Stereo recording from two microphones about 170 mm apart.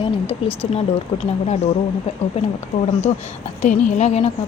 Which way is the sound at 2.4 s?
35° left (ahead or behind).